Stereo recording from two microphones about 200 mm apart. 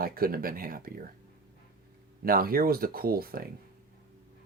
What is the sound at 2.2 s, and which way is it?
Speech, 45° right (ahead or behind).